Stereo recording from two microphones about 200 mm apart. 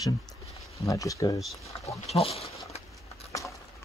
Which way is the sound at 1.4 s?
Centre (ahead or behind).